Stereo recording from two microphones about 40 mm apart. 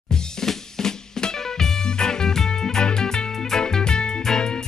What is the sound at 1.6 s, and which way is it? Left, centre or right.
Music, centre.